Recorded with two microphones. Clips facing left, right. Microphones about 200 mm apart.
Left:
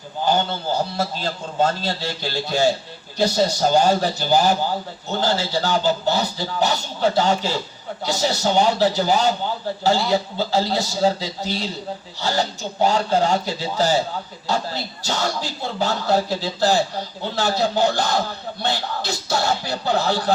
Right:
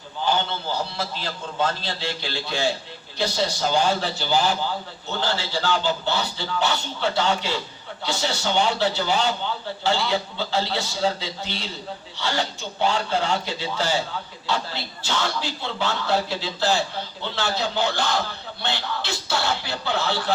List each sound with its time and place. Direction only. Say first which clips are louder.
0.2 s a man's voice: left 4 dB; 45° left (ahead or behind)